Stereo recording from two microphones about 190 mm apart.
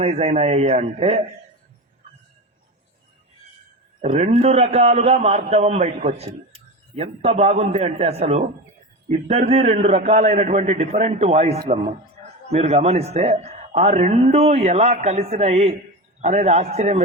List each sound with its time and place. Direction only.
0.0 s a man's voice: 35° right (ahead or behind)
4.0 s a man's voice: 35° right (ahead or behind)